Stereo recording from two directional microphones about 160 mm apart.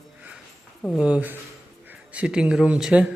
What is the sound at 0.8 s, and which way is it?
Speech, centre (ahead or behind).